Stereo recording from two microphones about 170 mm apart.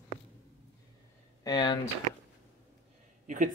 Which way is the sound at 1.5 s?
25° left (ahead or behind).